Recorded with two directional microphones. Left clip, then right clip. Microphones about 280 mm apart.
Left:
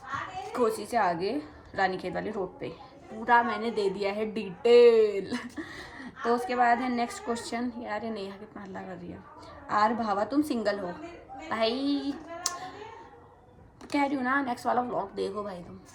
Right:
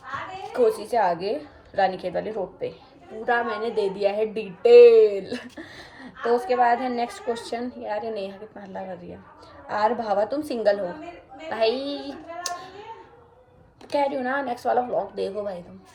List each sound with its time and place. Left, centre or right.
0.5 s a woman's voice: centre
6.2 s a woman's voice: left
6.5 s a woman's voice: centre
12.5 s a sound: centre
13.9 s a woman's voice: centre